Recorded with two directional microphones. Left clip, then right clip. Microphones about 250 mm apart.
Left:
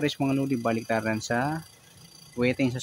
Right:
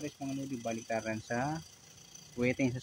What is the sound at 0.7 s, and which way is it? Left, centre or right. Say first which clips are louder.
Speech: left 7 dB; left.